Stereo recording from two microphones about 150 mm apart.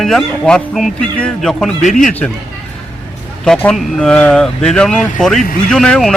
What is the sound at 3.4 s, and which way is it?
Speech, 5° left (ahead or behind).